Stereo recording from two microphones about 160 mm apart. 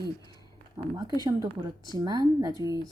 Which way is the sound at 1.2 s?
25° right (ahead or behind).